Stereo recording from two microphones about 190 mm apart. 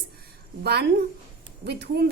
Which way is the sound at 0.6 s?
60° right (ahead or behind).